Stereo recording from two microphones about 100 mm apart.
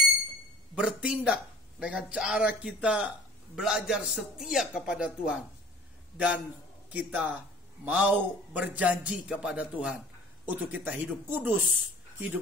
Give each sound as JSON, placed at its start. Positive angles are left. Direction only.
{"t": 0.7, "sound": "a man's voice", "side_deg": -10}